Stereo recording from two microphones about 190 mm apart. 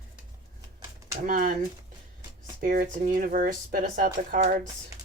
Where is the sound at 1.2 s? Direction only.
45° right (ahead or behind).